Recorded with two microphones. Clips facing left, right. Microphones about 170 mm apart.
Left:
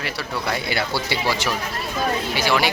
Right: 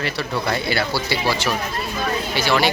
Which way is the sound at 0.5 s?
15° left (ahead or behind).